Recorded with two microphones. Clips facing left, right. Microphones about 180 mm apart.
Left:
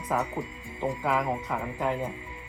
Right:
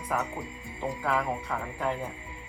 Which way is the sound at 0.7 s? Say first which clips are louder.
Left 2 dB; 15° left (ahead or behind).